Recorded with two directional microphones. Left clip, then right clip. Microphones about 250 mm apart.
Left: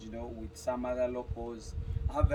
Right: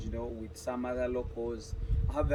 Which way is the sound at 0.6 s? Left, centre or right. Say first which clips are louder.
Left 2 dB; centre.